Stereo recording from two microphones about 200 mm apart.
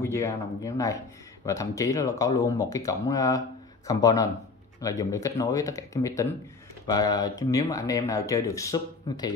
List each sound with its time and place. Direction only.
0.0 s speech: 15° left (ahead or behind)